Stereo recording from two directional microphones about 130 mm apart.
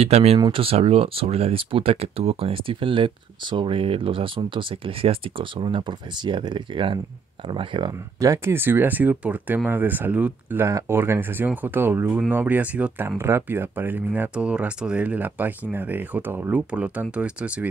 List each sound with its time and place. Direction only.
0.0 s speech: 50° right (ahead or behind)
8.2 s speech: 20° right (ahead or behind)